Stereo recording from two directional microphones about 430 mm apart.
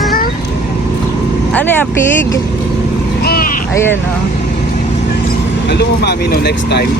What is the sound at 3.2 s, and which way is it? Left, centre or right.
Vehicle, left.